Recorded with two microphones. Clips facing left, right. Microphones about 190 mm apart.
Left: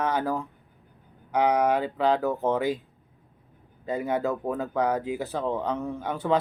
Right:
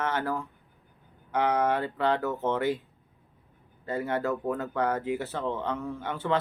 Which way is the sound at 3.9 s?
15° left (ahead or behind).